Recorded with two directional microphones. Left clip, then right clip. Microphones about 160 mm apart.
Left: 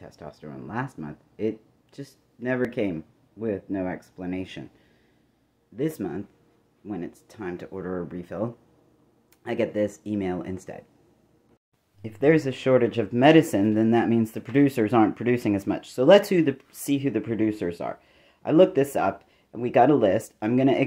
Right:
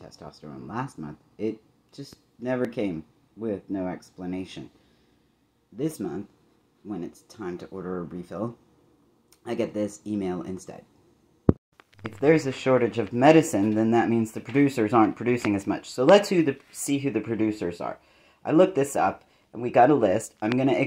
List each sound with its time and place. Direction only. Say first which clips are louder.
0.0 s speech: left 2 dB; 35° left (ahead or behind)
5.8 s speech: left 2 dB; 35° left (ahead or behind)
12.0 s speech: even; 25° left (ahead or behind)